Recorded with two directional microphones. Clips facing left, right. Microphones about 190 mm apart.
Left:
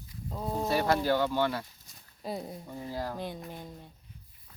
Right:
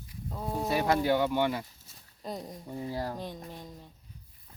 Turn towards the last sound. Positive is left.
turn(degrees=5)  # may be behind; listen again after turning